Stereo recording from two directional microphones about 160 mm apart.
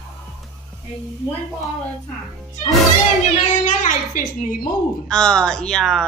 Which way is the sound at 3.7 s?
55° left (ahead or behind).